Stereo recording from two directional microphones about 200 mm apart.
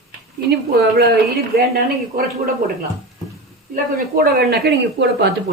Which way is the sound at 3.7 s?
50° right (ahead or behind).